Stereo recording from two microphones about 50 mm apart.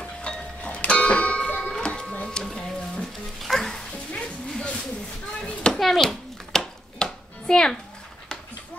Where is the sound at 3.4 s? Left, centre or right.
Centre.